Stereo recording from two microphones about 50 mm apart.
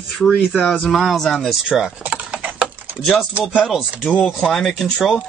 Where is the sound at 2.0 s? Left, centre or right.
Right.